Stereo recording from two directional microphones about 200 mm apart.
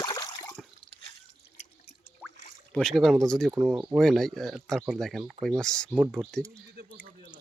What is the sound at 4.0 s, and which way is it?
Speech, centre (ahead or behind).